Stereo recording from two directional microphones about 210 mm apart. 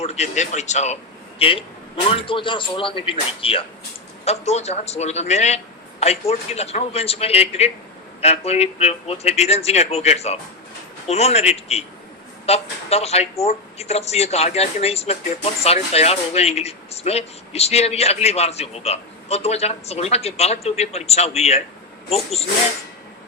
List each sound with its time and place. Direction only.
0.0 s a man's voice: 30° left (ahead or behind)